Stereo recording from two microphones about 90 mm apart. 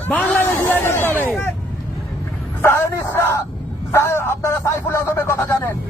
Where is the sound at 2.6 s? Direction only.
30° left (ahead or behind).